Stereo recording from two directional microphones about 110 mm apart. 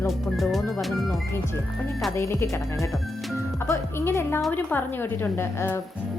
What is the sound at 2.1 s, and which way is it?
Speech, 25° left (ahead or behind).